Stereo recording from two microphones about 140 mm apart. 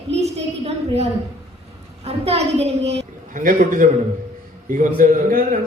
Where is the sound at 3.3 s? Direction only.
70° right (ahead or behind).